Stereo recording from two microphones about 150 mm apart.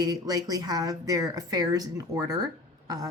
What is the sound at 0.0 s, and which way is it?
Speech, 25° right (ahead or behind).